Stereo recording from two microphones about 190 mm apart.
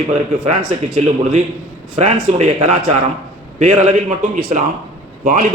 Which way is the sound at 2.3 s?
35° right (ahead or behind).